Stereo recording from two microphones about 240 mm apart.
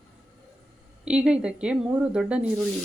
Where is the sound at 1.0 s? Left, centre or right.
Centre.